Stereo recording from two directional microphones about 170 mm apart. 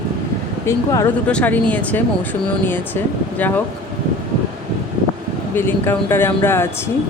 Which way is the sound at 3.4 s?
10° left (ahead or behind).